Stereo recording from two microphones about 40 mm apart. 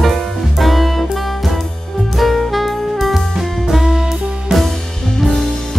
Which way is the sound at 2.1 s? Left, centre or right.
Centre.